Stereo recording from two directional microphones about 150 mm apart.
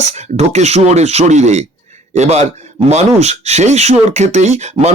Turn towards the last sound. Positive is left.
turn(degrees=-50)  # may be behind; listen again after turning